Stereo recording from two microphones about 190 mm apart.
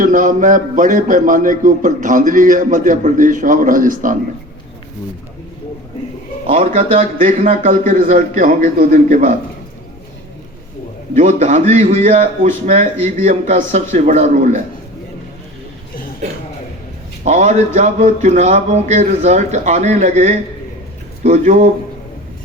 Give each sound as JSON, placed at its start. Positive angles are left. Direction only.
{"t": 0.0, "sound": "a man's voice", "side_deg": -45}
{"t": 6.5, "sound": "a man's voice", "side_deg": -35}
{"t": 7.6, "sound": "a man's voice", "side_deg": -45}
{"t": 11.2, "sound": "a man's voice", "side_deg": -40}
{"t": 17.2, "sound": "a man's voice", "side_deg": -40}